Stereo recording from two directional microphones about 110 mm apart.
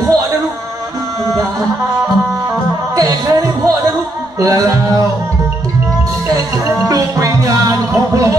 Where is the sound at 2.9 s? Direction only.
30° right (ahead or behind).